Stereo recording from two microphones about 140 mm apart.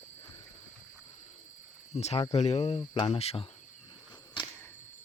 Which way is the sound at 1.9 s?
50° left (ahead or behind).